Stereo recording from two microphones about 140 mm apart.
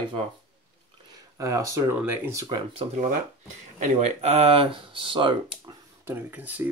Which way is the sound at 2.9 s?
60° right (ahead or behind).